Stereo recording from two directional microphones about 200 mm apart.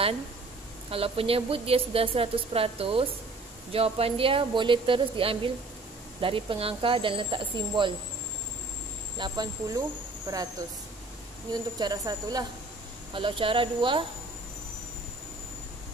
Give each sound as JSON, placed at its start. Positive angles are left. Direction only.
{"t": 0.8, "sound": "a woman's voice", "side_deg": -30}
{"t": 9.2, "sound": "a woman's voice", "side_deg": -20}
{"t": 11.8, "sound": "a woman's voice", "side_deg": -20}